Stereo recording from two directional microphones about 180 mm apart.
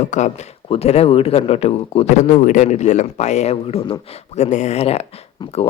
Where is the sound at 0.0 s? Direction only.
45° left (ahead or behind).